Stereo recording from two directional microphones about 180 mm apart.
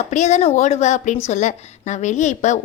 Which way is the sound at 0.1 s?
40° left (ahead or behind).